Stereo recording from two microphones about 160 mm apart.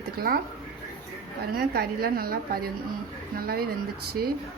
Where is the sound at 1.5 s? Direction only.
80° right.